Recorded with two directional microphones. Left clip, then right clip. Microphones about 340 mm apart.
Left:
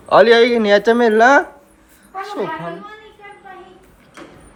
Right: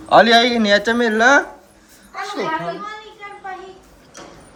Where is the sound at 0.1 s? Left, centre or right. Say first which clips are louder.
Left 1 dB; centre.